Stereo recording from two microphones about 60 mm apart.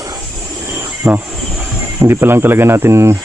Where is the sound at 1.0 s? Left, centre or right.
Right.